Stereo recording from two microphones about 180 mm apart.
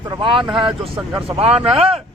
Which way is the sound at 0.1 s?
25° right (ahead or behind).